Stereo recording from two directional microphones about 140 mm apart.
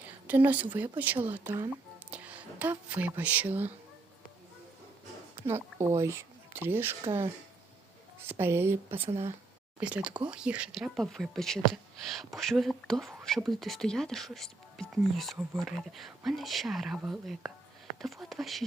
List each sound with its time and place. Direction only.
0.0 s speech: 10° right (ahead or behind)
5.8 s speech: 20° right (ahead or behind)
8.3 s speech: 15° right (ahead or behind)
9.0 s speech: 45° right (ahead or behind)
9.8 s speech: 10° right (ahead or behind)